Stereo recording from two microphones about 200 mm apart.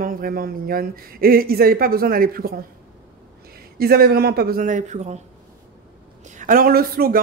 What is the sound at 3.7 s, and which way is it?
Speech, 50° right (ahead or behind).